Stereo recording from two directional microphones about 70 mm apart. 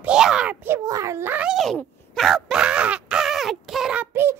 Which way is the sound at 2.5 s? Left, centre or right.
Centre.